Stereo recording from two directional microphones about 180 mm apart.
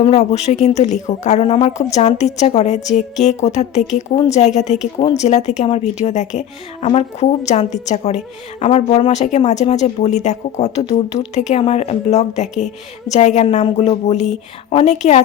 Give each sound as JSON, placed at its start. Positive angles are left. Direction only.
{"t": 0.0, "sound": "speech", "side_deg": 40}